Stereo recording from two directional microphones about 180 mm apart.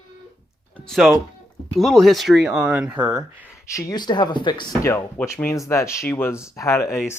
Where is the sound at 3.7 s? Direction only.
20° left (ahead or behind).